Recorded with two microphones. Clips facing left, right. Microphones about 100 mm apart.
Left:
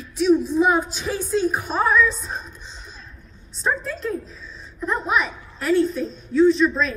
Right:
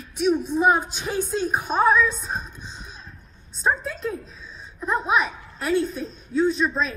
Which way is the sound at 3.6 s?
15° right (ahead or behind).